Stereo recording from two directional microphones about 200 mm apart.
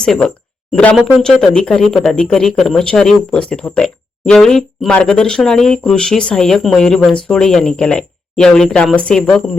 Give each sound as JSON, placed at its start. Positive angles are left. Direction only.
{"t": 0.0, "sound": "speech", "side_deg": 5}